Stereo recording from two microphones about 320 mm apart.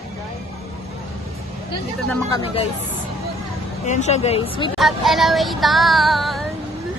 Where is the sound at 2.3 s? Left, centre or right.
Centre.